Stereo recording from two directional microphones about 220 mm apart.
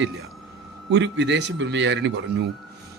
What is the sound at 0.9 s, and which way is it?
Speech, 55° right (ahead or behind).